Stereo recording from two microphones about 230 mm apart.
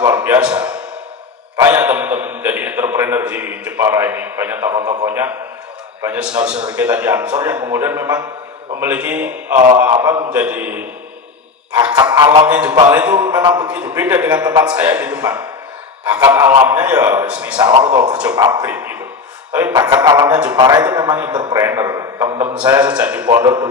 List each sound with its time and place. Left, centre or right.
0.0 s a sound: centre
1.5 s a man's voice: centre
12.1 s a man's voice: centre
17.6 s a man's voice: centre
20.6 s a man's voice: centre